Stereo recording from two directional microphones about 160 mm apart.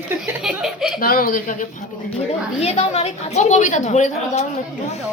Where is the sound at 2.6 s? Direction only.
40° left (ahead or behind).